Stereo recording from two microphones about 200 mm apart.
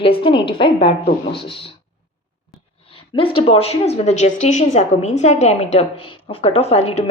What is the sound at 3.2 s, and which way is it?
A woman's voice, 25° left (ahead or behind).